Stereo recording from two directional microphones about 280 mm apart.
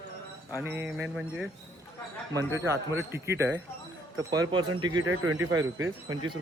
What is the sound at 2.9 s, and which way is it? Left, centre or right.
Speech, centre.